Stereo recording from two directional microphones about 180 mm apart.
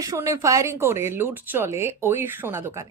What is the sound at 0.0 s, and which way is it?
A woman's voice, 20° right (ahead or behind).